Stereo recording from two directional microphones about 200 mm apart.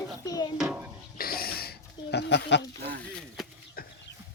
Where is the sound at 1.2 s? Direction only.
50° left (ahead or behind).